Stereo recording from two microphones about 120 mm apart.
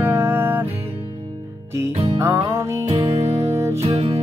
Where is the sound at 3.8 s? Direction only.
55° right (ahead or behind).